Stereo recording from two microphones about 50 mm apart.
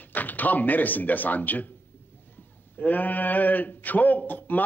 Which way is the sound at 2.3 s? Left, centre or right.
Left.